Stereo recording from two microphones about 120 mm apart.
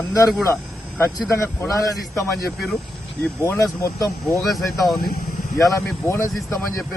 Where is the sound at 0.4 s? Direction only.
20° left (ahead or behind).